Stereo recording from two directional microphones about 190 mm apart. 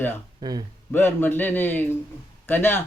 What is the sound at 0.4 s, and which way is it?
Speech, 20° right (ahead or behind).